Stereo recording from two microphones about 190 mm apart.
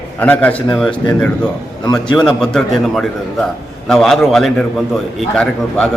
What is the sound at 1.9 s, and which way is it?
Speech, 20° left (ahead or behind).